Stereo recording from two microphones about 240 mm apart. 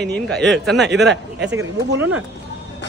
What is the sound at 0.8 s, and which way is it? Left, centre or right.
Speech, right.